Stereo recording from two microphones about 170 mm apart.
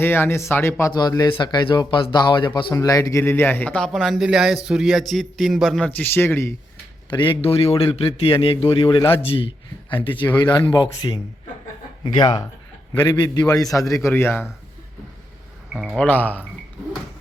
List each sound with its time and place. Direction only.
0.0 s speech: 15° left (ahead or behind)
7.1 s a man's voice: 30° left (ahead or behind); by 14.4 s 10° left (ahead or behind)
15.7 s speech: 5° right (ahead or behind)
16.0 s speech: 10° left (ahead or behind)